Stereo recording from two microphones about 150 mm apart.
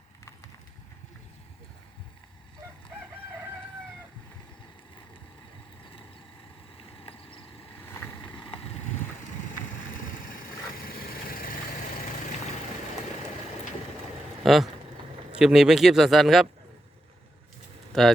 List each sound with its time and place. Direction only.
7.0 s vehicle: 35° left (ahead or behind)
9.9 s vehicle: 65° left (ahead or behind)
14.4 s speech: centre (ahead or behind)
17.9 s speech: centre (ahead or behind)